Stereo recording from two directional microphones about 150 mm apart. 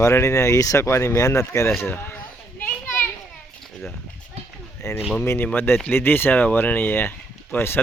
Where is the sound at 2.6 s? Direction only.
10° left (ahead or behind).